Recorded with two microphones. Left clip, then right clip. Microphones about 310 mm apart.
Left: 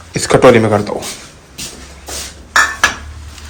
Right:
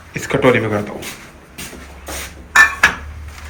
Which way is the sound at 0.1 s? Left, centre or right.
Centre.